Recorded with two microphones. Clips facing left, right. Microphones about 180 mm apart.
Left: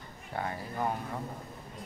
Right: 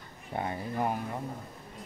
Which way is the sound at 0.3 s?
20° right (ahead or behind).